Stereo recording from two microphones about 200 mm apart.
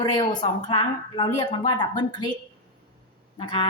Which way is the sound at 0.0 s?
20° left (ahead or behind).